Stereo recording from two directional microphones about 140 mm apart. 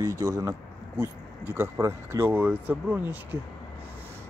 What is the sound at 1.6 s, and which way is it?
Speech, 20° right (ahead or behind).